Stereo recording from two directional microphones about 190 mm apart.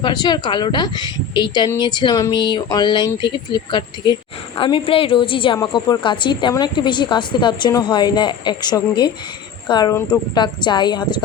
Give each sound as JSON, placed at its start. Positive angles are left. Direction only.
{"t": 0.0, "sound": "a woman's voice", "side_deg": 20}